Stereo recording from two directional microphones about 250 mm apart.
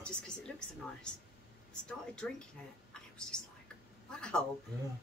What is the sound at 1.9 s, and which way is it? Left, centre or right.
Speech, centre.